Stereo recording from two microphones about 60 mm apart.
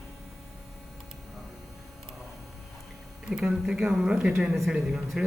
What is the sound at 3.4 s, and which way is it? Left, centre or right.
Speech, centre.